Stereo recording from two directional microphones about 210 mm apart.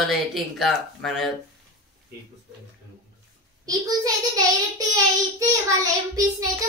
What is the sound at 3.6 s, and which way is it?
Child singing, 15° right (ahead or behind).